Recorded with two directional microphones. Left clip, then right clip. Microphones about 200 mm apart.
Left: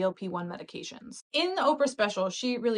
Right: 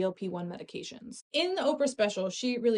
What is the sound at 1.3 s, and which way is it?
Speech, 10° right (ahead or behind).